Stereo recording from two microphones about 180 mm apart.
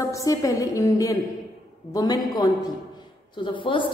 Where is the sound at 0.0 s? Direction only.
20° left (ahead or behind).